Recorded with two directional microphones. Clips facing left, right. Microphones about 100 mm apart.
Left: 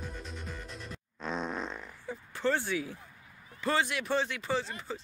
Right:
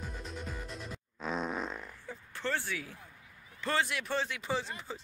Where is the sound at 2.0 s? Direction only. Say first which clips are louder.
Left 6 dB; 15° left (ahead or behind).